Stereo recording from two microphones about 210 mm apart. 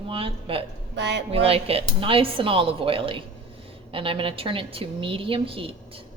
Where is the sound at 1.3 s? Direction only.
30° right (ahead or behind).